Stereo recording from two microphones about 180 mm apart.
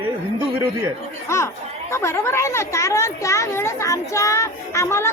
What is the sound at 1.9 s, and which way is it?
A woman's voice, 15° left (ahead or behind).